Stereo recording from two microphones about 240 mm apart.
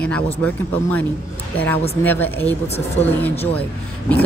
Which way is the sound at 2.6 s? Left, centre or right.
Left.